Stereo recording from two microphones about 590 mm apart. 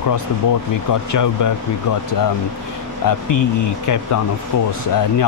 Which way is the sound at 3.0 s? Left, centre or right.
Left.